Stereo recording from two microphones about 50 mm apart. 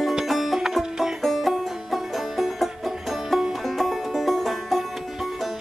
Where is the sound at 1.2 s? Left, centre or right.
Centre.